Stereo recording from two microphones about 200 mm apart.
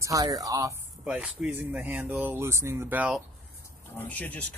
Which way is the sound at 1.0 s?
5° right (ahead or behind).